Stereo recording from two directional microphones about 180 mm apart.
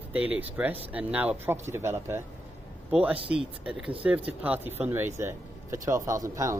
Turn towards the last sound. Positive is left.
turn(degrees=-15)  # may be behind; listen again after turning